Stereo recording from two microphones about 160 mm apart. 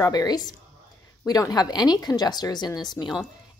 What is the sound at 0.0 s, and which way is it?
Speech, 25° left (ahead or behind).